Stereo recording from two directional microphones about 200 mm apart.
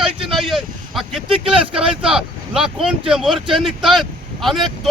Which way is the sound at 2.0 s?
5° right (ahead or behind).